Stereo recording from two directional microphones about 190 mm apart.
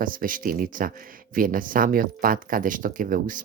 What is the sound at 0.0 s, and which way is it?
Speech, 45° right (ahead or behind).